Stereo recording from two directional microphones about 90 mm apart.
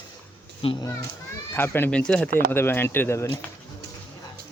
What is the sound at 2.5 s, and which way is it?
Speech, 25° left (ahead or behind).